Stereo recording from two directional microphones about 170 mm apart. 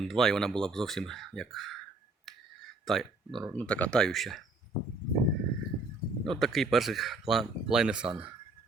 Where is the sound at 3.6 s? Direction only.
5° left (ahead or behind).